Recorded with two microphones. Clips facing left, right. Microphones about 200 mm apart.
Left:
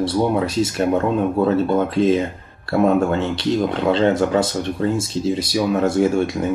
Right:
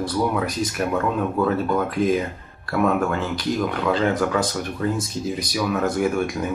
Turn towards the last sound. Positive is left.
turn(degrees=25)  # may be behind; listen again after turning